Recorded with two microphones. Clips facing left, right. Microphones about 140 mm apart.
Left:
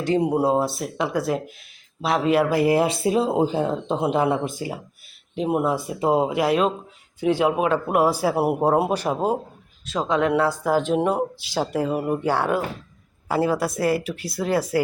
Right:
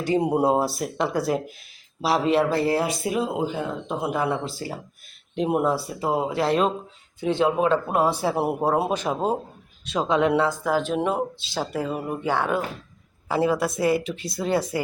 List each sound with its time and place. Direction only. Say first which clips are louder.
0.0 s speech: left 1 dB; 5° right (ahead or behind)
0.6 s speech: even; centre (ahead or behind); by 4.8 s 15° left (ahead or behind)
5.3 s speech: even; centre (ahead or behind)
5.6 s speech: left 2 dB; 20° left (ahead or behind)
6.4 s speech: left 1 dB; 5° left (ahead or behind)
10.1 s speech: even; 25° right (ahead or behind)
10.6 s speech: left 3 dB; 10° left (ahead or behind)